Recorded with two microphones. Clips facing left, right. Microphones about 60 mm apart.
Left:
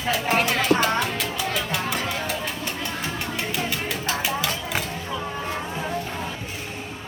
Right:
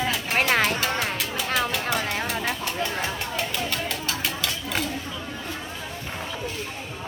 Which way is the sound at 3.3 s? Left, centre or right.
Centre.